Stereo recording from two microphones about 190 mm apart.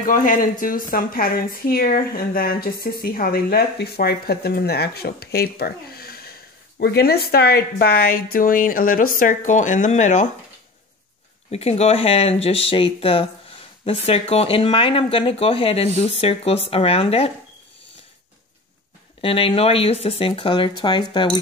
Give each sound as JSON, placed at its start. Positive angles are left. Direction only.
{"t": 0.0, "sound": "a woman's voice", "side_deg": 45}
{"t": 11.5, "sound": "speech", "side_deg": 35}
{"t": 19.2, "sound": "speech", "side_deg": 30}